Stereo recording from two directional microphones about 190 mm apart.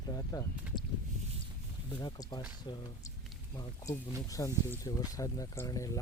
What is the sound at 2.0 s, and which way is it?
Speech, 20° left (ahead or behind).